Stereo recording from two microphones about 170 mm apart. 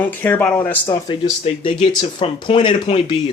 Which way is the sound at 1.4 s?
30° left (ahead or behind).